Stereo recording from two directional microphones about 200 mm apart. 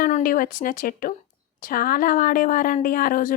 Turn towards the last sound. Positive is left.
turn(degrees=45)  # may be behind; listen again after turning